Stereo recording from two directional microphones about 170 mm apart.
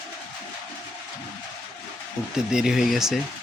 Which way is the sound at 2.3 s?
5° right (ahead or behind).